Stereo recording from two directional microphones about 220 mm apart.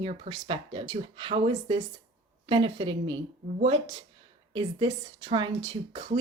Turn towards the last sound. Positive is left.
turn(degrees=-20)  # may be behind; listen again after turning